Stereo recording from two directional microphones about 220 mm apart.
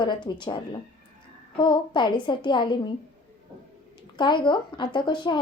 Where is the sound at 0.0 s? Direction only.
20° left (ahead or behind).